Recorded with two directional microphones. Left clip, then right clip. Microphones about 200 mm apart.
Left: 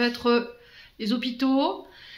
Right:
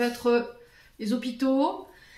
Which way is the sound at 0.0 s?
30° left (ahead or behind).